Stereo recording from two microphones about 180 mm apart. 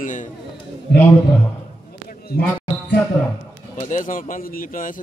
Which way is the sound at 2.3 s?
60° left (ahead or behind).